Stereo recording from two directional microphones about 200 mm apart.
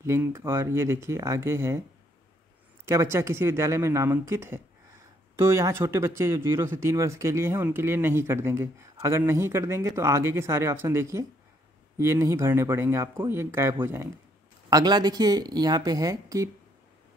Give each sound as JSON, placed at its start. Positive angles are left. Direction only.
{"t": 0.0, "sound": "speech", "side_deg": -15}
{"t": 2.8, "sound": "speech", "side_deg": -15}